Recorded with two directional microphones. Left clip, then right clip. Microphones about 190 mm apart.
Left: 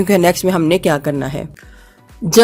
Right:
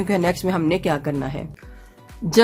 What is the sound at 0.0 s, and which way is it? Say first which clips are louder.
Speech: left 8 dB; 40° left (ahead or behind).